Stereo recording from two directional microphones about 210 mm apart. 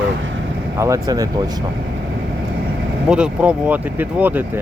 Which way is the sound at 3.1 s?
5° right (ahead or behind).